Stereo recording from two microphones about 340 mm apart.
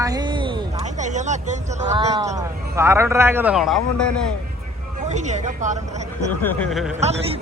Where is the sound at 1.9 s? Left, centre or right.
Centre.